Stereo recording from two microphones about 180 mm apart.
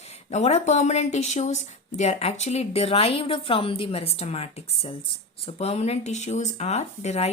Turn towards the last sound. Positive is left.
turn(degrees=40)  # may be behind; listen again after turning